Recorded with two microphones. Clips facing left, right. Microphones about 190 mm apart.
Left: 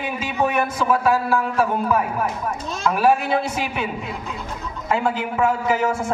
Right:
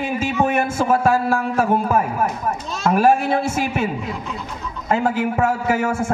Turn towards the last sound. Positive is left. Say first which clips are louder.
# right 1 dB
turn(degrees=-50)  # may be behind; listen again after turning